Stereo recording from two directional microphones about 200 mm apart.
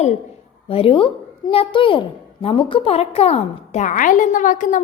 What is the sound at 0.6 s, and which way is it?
A woman's voice, 30° left (ahead or behind).